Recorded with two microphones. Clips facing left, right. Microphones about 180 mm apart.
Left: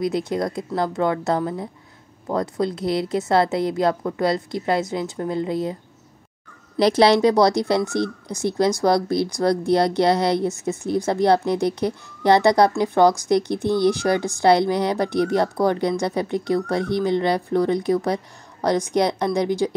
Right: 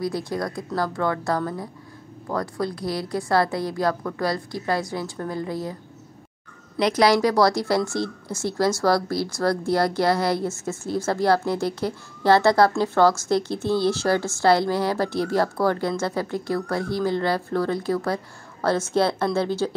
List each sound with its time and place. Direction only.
0.0 s speech: 20° left (ahead or behind)
6.8 s speech: 30° left (ahead or behind)